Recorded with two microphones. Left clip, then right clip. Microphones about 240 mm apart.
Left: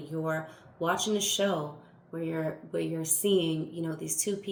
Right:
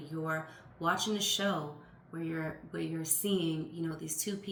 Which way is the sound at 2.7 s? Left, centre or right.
Centre.